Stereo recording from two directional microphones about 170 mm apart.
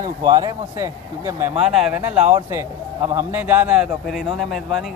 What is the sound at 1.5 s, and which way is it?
A man's voice, 5° right (ahead or behind).